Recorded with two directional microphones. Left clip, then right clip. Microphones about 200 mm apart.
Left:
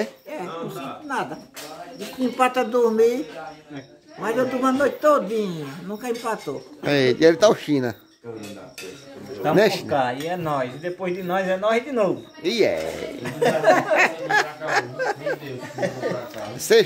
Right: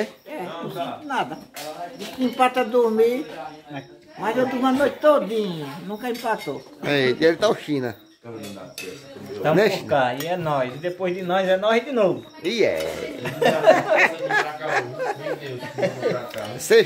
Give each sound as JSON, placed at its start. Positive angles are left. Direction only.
{"t": 0.0, "sound": "a sound", "side_deg": 15}
{"t": 1.0, "sound": "speech", "side_deg": -5}
{"t": 4.2, "sound": "speech", "side_deg": 0}
{"t": 6.8, "sound": "a man's voice", "side_deg": 30}
{"t": 9.6, "sound": "a man's voice", "side_deg": 30}
{"t": 9.8, "sound": "speech", "side_deg": -5}
{"t": 12.4, "sound": "speech", "side_deg": 25}
{"t": 13.2, "sound": "speech", "side_deg": 0}
{"t": 13.9, "sound": "speech", "side_deg": 20}
{"t": 16.5, "sound": "speech", "side_deg": 20}